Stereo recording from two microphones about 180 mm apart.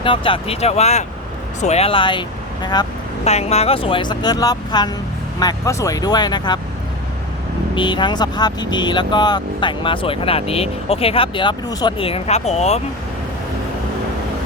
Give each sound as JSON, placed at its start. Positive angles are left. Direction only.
{"t": 0.0, "sound": "speech", "side_deg": 30}
{"t": 3.2, "sound": "speech", "side_deg": 35}
{"t": 7.8, "sound": "speech", "side_deg": 25}